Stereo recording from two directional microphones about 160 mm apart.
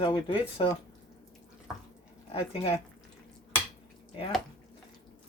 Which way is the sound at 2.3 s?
35° left (ahead or behind).